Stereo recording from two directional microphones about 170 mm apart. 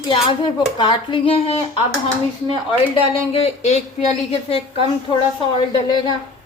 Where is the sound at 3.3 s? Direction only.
40° left (ahead or behind).